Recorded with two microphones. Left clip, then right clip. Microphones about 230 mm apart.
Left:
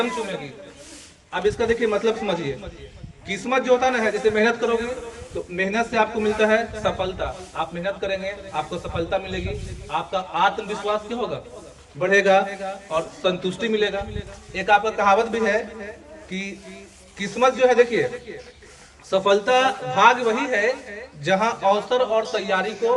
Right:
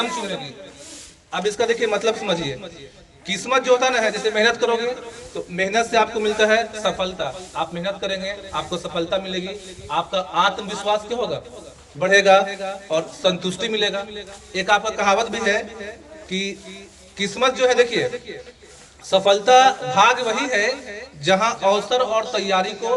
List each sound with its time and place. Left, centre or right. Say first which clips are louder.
1.4 s a man's voice: right 1 dB; right